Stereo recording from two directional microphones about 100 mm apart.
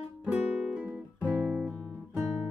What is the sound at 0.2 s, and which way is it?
Guitar, 10° right (ahead or behind).